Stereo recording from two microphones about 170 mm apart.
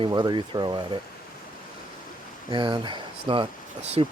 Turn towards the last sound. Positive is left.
turn(degrees=-35)  # may be behind; listen again after turning